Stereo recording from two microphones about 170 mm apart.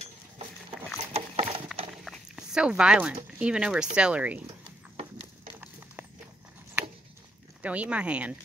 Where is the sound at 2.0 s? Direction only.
5° right (ahead or behind).